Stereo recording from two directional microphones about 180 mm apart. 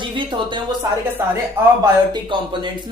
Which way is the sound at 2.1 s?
25° right (ahead or behind).